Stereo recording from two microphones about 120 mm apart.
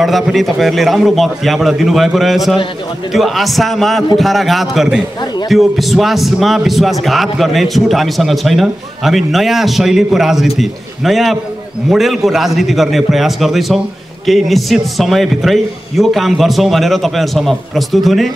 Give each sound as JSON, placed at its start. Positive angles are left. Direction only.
{"t": 0.0, "sound": "a man's voice", "side_deg": 0}